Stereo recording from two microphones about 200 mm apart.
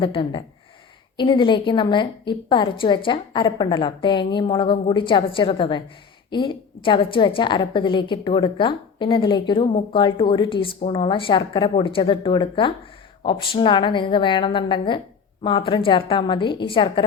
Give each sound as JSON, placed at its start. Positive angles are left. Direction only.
{"t": 0.0, "sound": "a woman's voice", "side_deg": 25}